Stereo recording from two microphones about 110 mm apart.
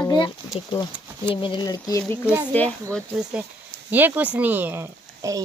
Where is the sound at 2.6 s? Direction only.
15° left (ahead or behind).